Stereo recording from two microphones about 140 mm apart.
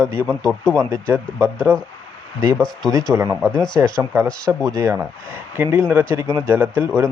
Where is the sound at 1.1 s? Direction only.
20° right (ahead or behind).